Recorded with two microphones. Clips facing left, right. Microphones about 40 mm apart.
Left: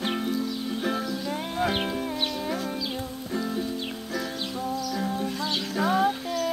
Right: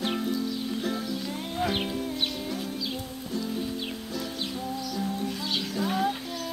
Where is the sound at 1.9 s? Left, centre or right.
Left.